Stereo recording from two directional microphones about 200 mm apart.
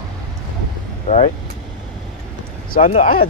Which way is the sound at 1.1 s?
40° left (ahead or behind).